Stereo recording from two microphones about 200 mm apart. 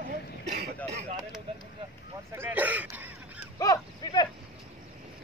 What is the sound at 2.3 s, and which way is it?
Speech, 10° right (ahead or behind).